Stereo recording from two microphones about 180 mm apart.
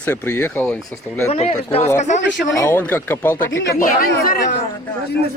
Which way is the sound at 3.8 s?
50° left (ahead or behind).